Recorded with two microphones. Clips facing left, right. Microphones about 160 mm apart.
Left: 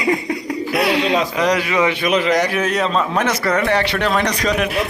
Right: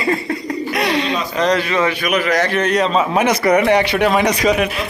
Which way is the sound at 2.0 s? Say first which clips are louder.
Left 1 dB; 25° left (ahead or behind).